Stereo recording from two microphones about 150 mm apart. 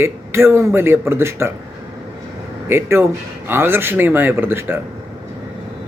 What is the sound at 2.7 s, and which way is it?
Speech, 15° right (ahead or behind).